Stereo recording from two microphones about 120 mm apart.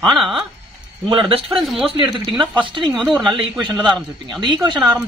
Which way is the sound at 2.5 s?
40° right (ahead or behind).